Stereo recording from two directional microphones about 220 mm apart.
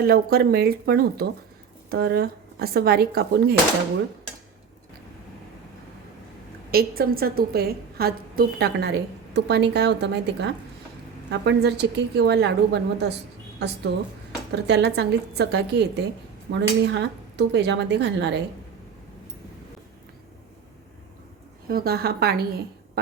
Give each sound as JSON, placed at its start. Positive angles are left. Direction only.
{"t": 0.0, "sound": "a woman's voice", "side_deg": -45}
{"t": 6.7, "sound": "a woman's voice", "side_deg": -45}
{"t": 14.5, "sound": "a woman's voice", "side_deg": -50}
{"t": 21.7, "sound": "a woman's voice", "side_deg": -45}